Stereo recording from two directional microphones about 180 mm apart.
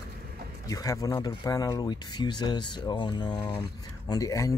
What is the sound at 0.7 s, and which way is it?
Speech, 20° left (ahead or behind).